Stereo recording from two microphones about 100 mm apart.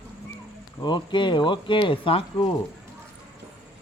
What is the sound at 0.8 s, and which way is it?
Speech, 50° left (ahead or behind).